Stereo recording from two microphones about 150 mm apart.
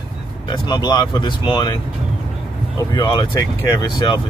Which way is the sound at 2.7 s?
30° left (ahead or behind).